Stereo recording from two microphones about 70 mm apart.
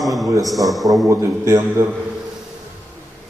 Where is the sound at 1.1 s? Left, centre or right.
Right.